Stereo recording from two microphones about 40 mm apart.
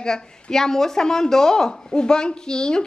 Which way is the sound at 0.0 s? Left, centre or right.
Centre.